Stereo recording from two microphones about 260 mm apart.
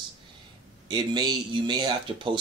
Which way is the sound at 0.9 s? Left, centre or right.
Centre.